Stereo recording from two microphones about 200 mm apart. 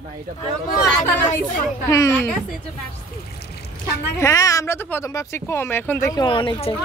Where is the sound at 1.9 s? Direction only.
15° left (ahead or behind).